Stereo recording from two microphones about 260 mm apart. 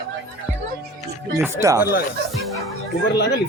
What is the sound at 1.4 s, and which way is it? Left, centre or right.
Speech, centre.